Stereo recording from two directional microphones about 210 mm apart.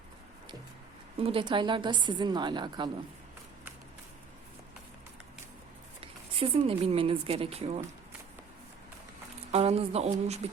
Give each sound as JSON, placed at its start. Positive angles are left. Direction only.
{"t": 1.2, "sound": "a woman's voice", "side_deg": -25}
{"t": 6.0, "sound": "speech", "side_deg": -30}
{"t": 9.5, "sound": "speech", "side_deg": -30}